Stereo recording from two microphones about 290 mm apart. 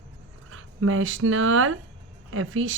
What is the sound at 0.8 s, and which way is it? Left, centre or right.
A woman's voice, right.